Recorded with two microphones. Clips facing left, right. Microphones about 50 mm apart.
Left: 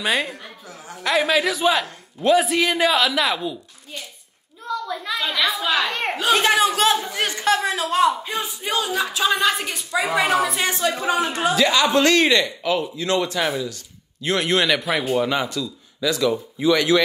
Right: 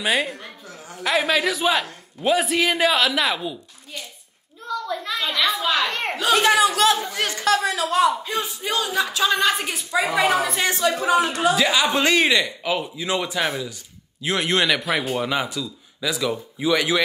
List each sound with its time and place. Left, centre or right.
0.0 s a man's voice: centre
4.6 s a sound: centre
6.1 s a sound: left
9.4 s a man's voice: centre
10.8 s speech: left
11.5 s a man's voice: centre